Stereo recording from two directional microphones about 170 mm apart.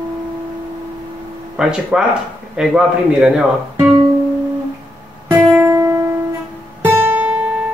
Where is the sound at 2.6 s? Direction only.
5° right (ahead or behind).